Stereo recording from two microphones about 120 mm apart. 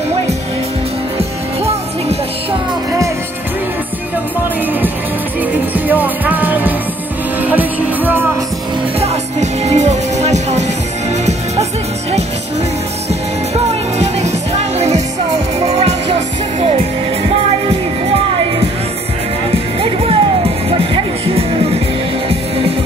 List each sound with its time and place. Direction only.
5.9 s music: 15° right (ahead or behind)
9.0 s music: 65° right (ahead or behind)
13.9 s music: 65° right (ahead or behind)